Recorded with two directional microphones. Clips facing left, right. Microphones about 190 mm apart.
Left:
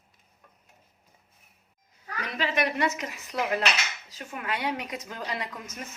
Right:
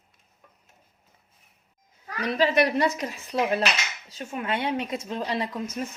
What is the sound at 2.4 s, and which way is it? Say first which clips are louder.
A woman's voice: right 6 dB; 35° right (ahead or behind).